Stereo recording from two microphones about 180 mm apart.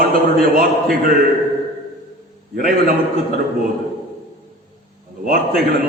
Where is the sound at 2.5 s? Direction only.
55° right (ahead or behind).